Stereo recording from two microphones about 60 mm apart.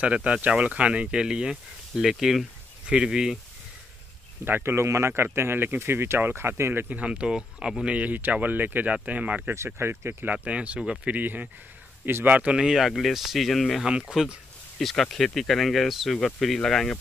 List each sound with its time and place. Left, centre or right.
0.0 s speech: right
4.5 s speech: right
6.9 s speech: right
7.9 s speech: right
9.5 s speech: right
10.2 s speech: right
12.5 s speech: centre
13.8 s speech: centre